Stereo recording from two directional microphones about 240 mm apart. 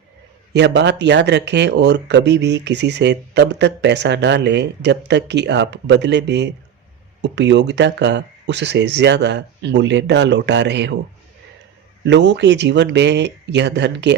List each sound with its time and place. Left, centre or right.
0.5 s speech: right
12.0 s speech: right